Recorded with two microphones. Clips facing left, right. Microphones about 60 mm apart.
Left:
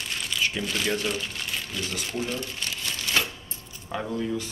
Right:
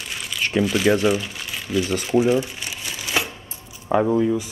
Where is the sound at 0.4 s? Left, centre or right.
Right.